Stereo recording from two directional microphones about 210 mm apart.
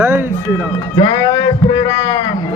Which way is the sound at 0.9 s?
20° left (ahead or behind).